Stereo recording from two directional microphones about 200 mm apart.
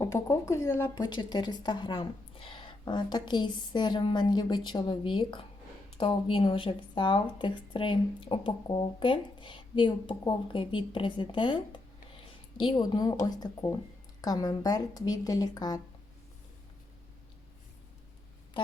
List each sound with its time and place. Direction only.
0.0 s speech: 15° left (ahead or behind)